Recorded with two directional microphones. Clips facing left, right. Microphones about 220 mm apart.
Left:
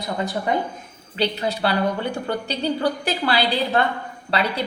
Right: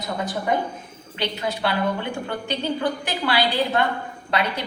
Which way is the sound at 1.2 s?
35° left (ahead or behind).